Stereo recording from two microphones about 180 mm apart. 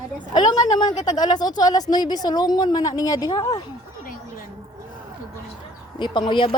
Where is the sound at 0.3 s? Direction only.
25° left (ahead or behind).